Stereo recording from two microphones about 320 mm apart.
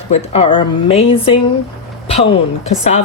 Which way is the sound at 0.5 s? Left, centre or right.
Centre.